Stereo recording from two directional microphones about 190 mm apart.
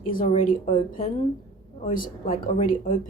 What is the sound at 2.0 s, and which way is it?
Speech, 50° left (ahead or behind).